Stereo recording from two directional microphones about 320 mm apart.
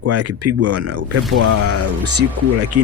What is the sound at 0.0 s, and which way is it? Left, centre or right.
Speech, right.